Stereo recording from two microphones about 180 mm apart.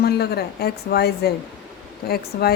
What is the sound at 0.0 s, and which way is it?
Speech, 65° left (ahead or behind).